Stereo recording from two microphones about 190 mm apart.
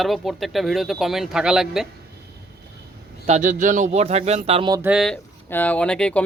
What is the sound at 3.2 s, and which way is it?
Speech, 40° right (ahead or behind).